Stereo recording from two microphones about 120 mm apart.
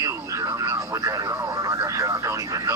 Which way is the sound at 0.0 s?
25° right (ahead or behind).